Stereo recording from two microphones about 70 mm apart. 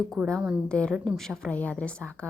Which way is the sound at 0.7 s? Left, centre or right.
Centre.